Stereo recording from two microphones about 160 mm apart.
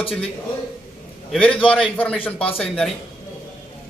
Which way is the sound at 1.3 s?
5° left (ahead or behind).